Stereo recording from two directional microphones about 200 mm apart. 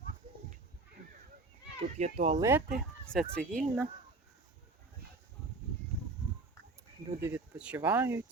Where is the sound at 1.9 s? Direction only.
35° right (ahead or behind).